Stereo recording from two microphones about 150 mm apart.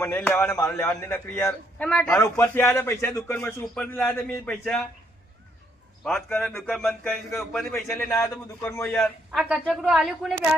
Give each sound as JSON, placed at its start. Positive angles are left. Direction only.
{"t": 0.0, "sound": "speech", "side_deg": 10}
{"t": 1.5, "sound": "speech", "side_deg": 10}
{"t": 6.1, "sound": "speech", "side_deg": 5}
{"t": 8.2, "sound": "a man's voice", "side_deg": 20}
{"t": 8.9, "sound": "speech", "side_deg": 5}